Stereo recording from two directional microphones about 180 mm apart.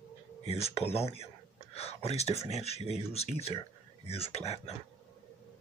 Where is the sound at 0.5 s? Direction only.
35° left (ahead or behind).